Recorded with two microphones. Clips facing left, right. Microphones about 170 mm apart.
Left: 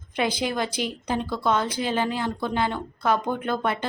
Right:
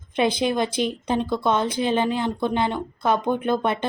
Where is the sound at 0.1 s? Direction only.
20° right (ahead or behind).